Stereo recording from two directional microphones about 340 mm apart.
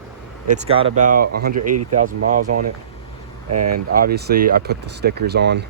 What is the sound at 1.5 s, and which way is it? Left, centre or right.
Speech, right.